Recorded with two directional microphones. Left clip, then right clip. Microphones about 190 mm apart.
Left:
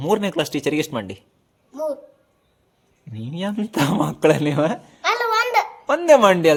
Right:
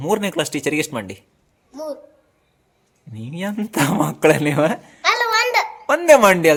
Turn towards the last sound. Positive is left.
turn(degrees=-10)  # may be behind; listen again after turning